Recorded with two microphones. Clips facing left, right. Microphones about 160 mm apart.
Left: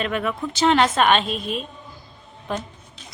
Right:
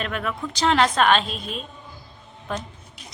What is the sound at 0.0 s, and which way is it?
Speech, centre (ahead or behind).